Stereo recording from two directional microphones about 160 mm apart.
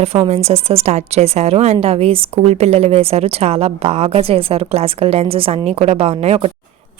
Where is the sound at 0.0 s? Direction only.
40° right (ahead or behind).